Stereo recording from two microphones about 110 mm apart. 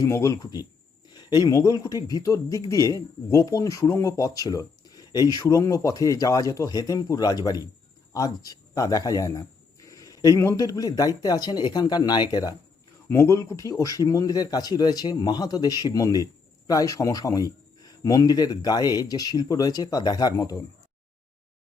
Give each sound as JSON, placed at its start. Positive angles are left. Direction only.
{"t": 0.0, "sound": "speech", "side_deg": 25}
{"t": 1.1, "sound": "speech", "side_deg": 40}
{"t": 13.1, "sound": "speech", "side_deg": 25}